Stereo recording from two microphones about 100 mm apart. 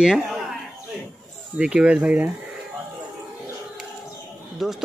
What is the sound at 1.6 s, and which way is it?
Speech, 10° right (ahead or behind).